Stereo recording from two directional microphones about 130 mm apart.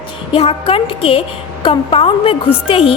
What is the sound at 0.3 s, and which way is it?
Speech, 45° left (ahead or behind).